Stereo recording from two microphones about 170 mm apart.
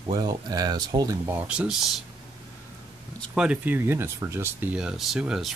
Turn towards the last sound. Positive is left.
turn(degrees=-5)  # may be behind; listen again after turning